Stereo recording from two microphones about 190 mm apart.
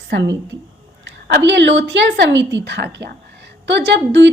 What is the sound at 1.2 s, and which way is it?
A woman's voice, 65° right (ahead or behind).